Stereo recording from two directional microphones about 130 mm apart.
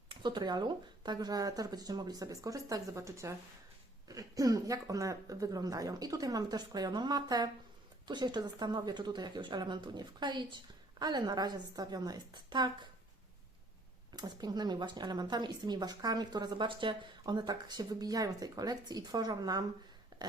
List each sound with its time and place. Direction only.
0.1 s a woman's voice: 35° right (ahead or behind)
14.2 s a woman's voice: 30° right (ahead or behind)
20.1 s a sound: 35° right (ahead or behind)